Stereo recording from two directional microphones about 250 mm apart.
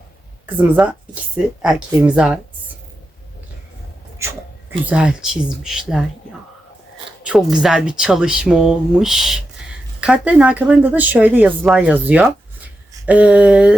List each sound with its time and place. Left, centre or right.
0.4 s speech: centre
4.2 s speech: centre
7.4 s speech: centre
12.9 s a sound: centre